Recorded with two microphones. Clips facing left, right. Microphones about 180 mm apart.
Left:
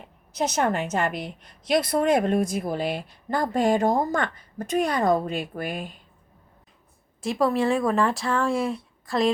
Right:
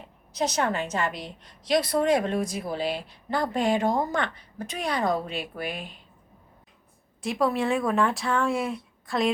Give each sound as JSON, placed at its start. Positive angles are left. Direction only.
{"t": 0.3, "sound": "a woman's voice", "side_deg": 50}
{"t": 7.2, "sound": "speech", "side_deg": 0}